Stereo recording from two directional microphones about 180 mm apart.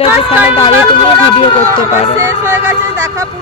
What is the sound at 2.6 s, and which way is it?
Speech, 15° right (ahead or behind).